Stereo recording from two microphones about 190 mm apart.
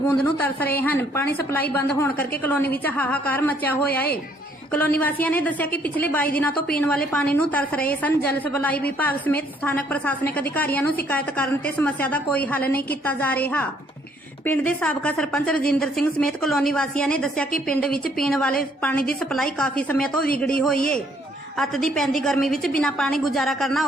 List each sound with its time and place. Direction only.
0.1 s a woman's voice: 10° left (ahead or behind)
1.2 s a woman's voice: 55° left (ahead or behind)
1.7 s a woman's voice: 10° left (ahead or behind)